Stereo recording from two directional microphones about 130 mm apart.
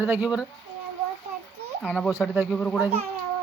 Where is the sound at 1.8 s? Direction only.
5° left (ahead or behind).